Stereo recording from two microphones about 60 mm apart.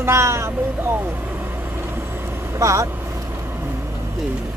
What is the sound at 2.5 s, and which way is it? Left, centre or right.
Speech, right.